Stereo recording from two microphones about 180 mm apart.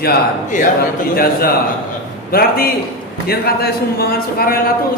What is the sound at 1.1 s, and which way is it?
A man's voice, 55° left (ahead or behind).